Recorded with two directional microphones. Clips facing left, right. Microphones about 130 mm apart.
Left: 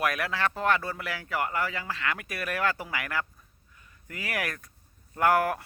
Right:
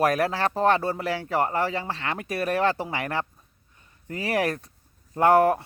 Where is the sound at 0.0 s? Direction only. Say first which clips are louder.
Right 6 dB; 35° right (ahead or behind).